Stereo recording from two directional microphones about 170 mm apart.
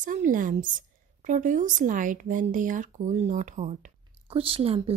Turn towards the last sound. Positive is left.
turn(degrees=-35)  # may be behind; listen again after turning